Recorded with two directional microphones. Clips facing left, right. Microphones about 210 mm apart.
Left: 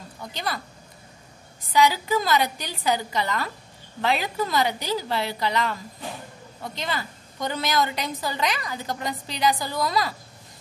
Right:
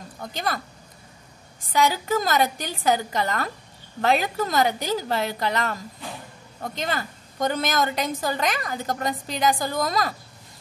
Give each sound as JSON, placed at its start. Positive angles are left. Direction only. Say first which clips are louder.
{"t": 0.2, "sound": "speech", "louder": "right 3 dB", "side_deg": -50}
{"t": 1.7, "sound": "a woman's voice", "louder": "left 1 dB", "side_deg": -50}